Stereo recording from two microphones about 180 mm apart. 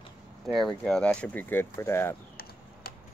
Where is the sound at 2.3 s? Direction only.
55° left (ahead or behind).